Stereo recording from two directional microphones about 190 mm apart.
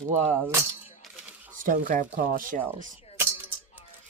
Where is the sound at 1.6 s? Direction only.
45° right (ahead or behind).